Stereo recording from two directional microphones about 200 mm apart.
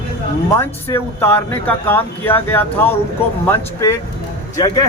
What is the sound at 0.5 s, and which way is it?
Speech, 10° left (ahead or behind).